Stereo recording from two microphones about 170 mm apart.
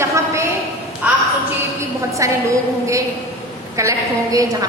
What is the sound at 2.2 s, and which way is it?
Speech, 20° right (ahead or behind).